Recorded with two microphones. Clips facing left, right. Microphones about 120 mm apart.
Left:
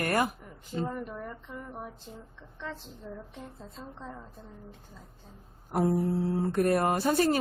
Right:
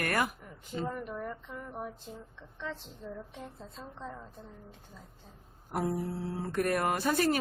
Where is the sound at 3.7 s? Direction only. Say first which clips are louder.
Even; centre (ahead or behind).